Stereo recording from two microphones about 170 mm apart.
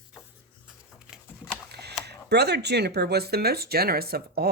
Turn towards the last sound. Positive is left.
turn(degrees=-65)  # may be behind; listen again after turning